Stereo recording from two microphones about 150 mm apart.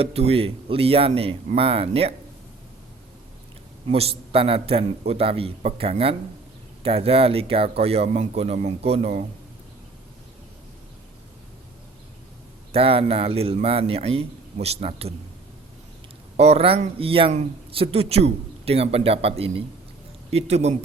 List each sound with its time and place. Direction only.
0.0 s a man's voice: 40° right (ahead or behind)
3.9 s a man's voice: 40° right (ahead or behind)
12.7 s a man's voice: 40° right (ahead or behind)
16.4 s a man's voice: 40° right (ahead or behind)